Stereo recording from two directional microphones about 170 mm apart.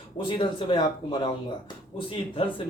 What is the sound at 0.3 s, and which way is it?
Speech, 30° left (ahead or behind).